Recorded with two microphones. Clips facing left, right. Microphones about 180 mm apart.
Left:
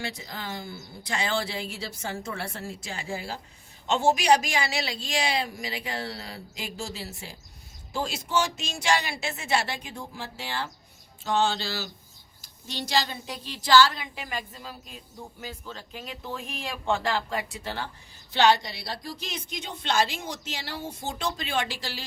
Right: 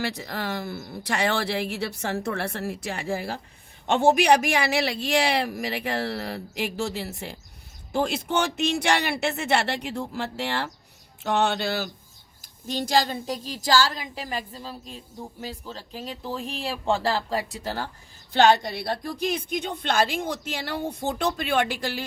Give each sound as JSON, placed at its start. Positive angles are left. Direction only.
{"t": 0.0, "sound": "a woman's voice", "side_deg": -65}
{"t": 12.4, "sound": "a woman's voice", "side_deg": -45}